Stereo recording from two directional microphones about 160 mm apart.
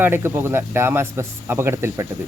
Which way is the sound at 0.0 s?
15° right (ahead or behind).